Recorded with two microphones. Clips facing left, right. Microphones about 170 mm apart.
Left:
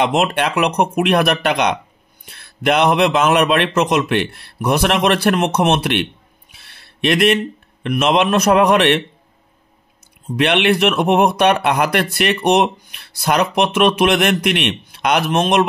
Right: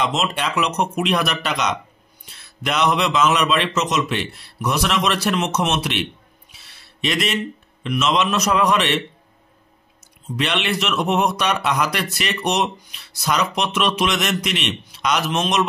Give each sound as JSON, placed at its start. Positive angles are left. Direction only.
{"t": 0.0, "sound": "speech", "side_deg": 60}
{"t": 6.5, "sound": "a sound", "side_deg": 55}
{"t": 7.8, "sound": "speech", "side_deg": 55}
{"t": 10.2, "sound": "speech", "side_deg": 55}